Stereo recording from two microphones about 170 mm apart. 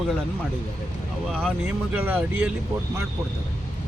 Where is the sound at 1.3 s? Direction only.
Centre (ahead or behind).